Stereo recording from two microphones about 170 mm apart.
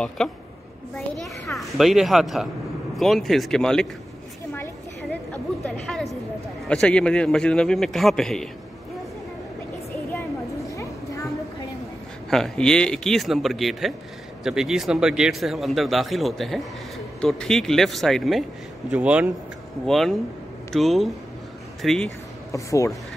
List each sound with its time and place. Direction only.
0.2 s speech: centre (ahead or behind)
5.9 s speech: centre (ahead or behind)
10.7 s a sound: 20° left (ahead or behind)
12.3 s speech: centre (ahead or behind)
22.5 s speech: 20° left (ahead or behind)